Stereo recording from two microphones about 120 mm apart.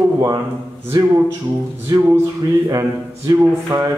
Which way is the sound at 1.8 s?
25° right (ahead or behind).